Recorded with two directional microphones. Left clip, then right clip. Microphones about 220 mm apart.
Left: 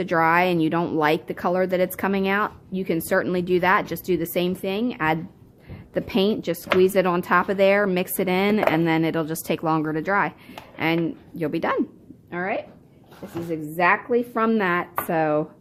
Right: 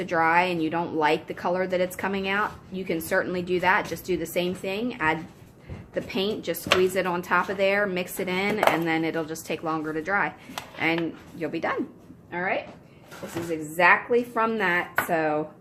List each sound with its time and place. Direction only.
0.0 s a woman's voice: 50° left (ahead or behind)
13.7 s a woman's voice: 45° left (ahead or behind)